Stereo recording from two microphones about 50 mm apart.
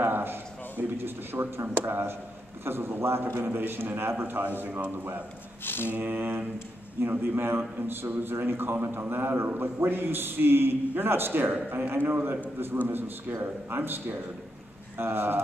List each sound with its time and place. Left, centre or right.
0.0 s a man's voice: right
5.6 s mantra: left
5.9 s a man's voice: right